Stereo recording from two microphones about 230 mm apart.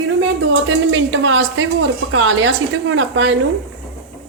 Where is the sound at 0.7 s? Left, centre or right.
Right.